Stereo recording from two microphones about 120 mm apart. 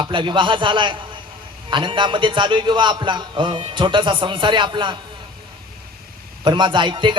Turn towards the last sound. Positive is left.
turn(degrees=-40)  # may be behind; listen again after turning